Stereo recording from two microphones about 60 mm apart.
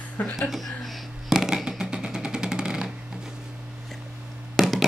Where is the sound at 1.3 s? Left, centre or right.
Centre.